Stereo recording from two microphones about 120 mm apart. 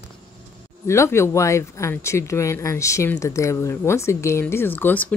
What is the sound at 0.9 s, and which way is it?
Speech, 20° left (ahead or behind).